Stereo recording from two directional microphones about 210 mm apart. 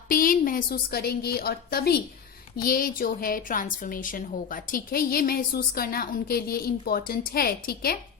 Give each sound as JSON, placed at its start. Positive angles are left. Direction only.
{"t": 0.1, "sound": "a woman's voice", "side_deg": 40}